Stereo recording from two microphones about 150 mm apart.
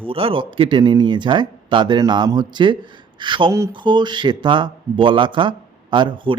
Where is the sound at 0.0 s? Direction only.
35° right (ahead or behind).